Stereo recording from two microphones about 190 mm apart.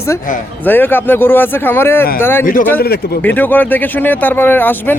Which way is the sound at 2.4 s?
45° left (ahead or behind).